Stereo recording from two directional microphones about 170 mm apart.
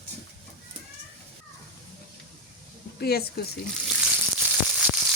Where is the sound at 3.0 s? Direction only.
65° left (ahead or behind).